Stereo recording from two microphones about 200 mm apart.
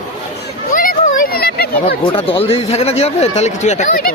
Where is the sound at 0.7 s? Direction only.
40° left (ahead or behind).